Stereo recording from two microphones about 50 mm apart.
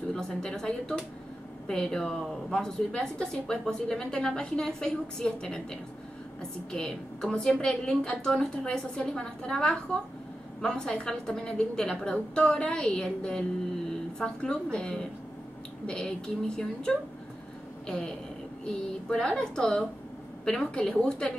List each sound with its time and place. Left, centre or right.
0.1 s a woman's voice: centre